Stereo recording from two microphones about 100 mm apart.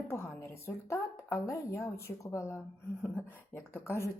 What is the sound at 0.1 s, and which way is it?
A woman's voice, 25° left (ahead or behind).